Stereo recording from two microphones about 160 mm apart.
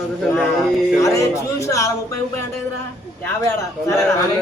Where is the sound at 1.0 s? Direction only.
20° left (ahead or behind).